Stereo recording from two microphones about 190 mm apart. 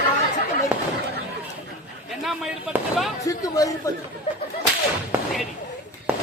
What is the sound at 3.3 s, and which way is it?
Speech, 20° left (ahead or behind).